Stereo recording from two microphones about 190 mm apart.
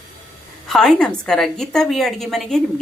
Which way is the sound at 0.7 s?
Centre (ahead or behind).